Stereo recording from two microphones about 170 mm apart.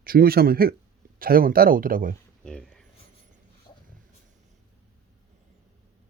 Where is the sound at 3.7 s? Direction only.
25° left (ahead or behind).